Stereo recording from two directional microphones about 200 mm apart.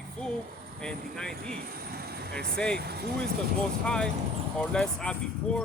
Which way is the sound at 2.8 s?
55° right (ahead or behind).